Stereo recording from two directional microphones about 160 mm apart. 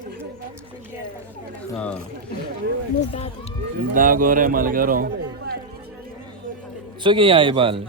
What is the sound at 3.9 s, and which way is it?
A man's voice, 60° right (ahead or behind).